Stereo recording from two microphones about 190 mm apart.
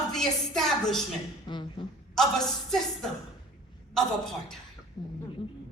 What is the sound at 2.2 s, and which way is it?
Speech, centre (ahead or behind).